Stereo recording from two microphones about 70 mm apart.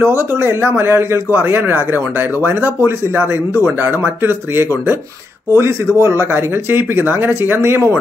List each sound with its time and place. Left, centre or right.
0.0 s speech: right